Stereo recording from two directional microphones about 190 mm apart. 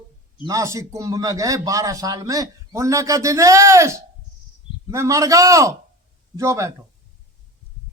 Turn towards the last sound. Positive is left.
turn(degrees=-15)  # may be behind; listen again after turning